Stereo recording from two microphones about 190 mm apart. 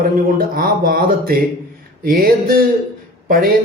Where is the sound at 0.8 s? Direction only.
50° right (ahead or behind).